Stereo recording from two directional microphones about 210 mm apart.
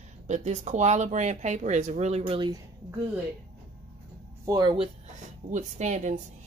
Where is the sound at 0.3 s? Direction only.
35° right (ahead or behind).